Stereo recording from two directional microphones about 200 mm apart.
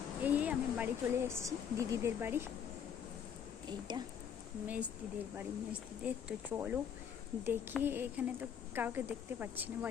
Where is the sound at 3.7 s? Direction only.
20° right (ahead or behind).